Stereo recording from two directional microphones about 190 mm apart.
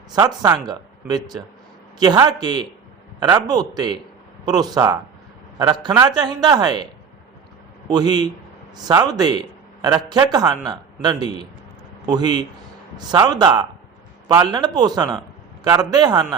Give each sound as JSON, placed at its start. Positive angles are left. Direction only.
{"t": 0.2, "sound": "a man's voice", "side_deg": -20}
{"t": 7.9, "sound": "a man's voice", "side_deg": -20}